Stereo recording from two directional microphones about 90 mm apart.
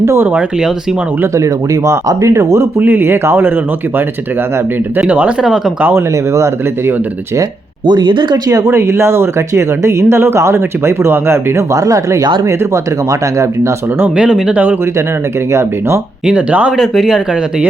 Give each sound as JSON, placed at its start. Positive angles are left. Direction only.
{"t": 0.0, "sound": "speech", "side_deg": -30}
{"t": 6.3, "sound": "speech", "side_deg": -35}
{"t": 7.9, "sound": "speech", "side_deg": -55}
{"t": 8.7, "sound": "speech", "side_deg": -30}
{"t": 14.2, "sound": "speech", "side_deg": -10}
{"t": 16.2, "sound": "speech", "side_deg": -15}
{"t": 16.7, "sound": "speech", "side_deg": 0}